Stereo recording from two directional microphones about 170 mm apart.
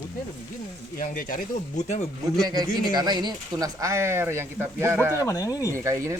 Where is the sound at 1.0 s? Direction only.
55° left (ahead or behind).